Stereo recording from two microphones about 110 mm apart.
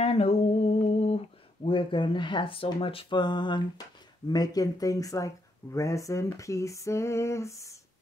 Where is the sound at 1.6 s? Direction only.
50° left (ahead or behind).